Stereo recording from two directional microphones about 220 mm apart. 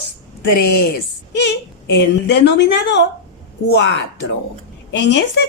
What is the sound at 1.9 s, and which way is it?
A woman's voice, 50° left (ahead or behind).